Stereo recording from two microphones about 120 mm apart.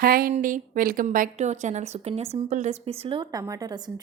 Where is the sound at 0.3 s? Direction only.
80° right; by 3.2 s 50° right (ahead or behind).